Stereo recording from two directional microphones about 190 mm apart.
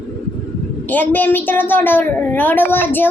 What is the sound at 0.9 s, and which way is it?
A woman's voice, 10° left (ahead or behind).